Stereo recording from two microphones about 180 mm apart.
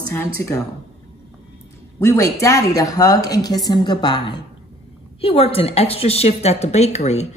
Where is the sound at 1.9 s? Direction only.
15° left (ahead or behind).